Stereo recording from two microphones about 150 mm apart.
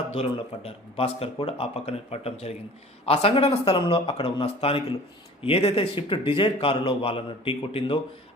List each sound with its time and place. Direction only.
0.2 s a man's voice: 40° left (ahead or behind)